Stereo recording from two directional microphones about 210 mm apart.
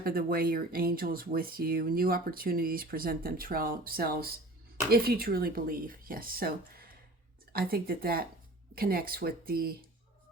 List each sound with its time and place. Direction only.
0.0 s speech: 45° right (ahead or behind)